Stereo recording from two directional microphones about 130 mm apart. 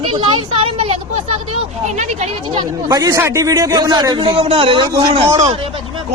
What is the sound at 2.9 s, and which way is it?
A man's voice, 25° right (ahead or behind).